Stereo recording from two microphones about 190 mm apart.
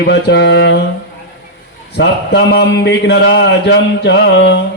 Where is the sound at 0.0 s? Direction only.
65° left (ahead or behind).